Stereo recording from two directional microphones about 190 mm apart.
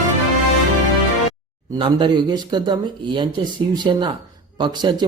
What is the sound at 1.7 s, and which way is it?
Speech, 25° right (ahead or behind).